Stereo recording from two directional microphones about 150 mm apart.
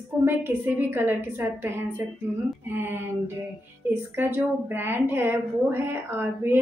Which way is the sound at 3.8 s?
15° right (ahead or behind).